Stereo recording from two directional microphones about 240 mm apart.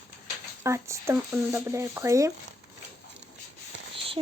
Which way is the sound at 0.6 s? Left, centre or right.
Centre.